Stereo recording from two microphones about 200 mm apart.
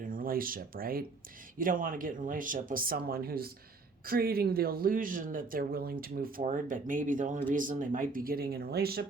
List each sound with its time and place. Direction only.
0.0 s speech: 45° right (ahead or behind)